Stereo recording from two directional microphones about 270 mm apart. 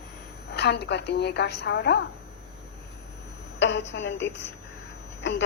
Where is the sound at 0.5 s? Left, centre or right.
Left.